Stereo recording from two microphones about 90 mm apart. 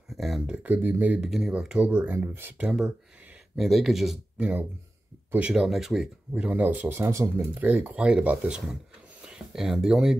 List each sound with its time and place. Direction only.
0.2 s speech: 5° right (ahead or behind)
0.6 s speech: 20° right (ahead or behind)
1.3 s speech: 5° right (ahead or behind); by 2.6 s 25° right (ahead or behind)
2.6 s speech: 5° right (ahead or behind)
4.4 s speech: 15° right (ahead or behind)